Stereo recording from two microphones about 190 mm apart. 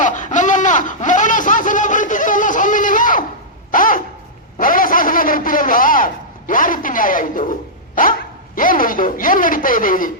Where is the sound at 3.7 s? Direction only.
45° left (ahead or behind).